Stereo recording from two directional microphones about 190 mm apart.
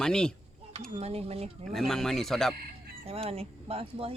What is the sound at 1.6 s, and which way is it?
Speech, centre (ahead or behind).